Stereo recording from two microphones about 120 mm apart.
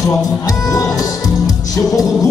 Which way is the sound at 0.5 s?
30° left (ahead or behind).